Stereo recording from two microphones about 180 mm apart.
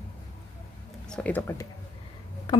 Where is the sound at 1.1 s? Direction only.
10° left (ahead or behind).